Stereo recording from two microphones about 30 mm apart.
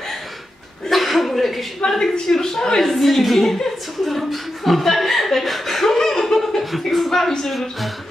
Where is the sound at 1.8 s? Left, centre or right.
Left.